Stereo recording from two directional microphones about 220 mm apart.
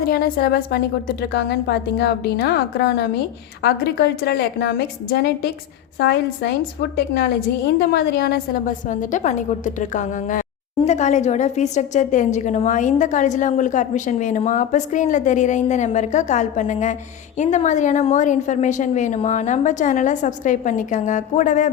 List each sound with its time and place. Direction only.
0.0 s a woman's voice: 40° left (ahead or behind)